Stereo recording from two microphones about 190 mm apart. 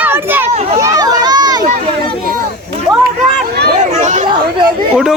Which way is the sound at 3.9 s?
40° right (ahead or behind).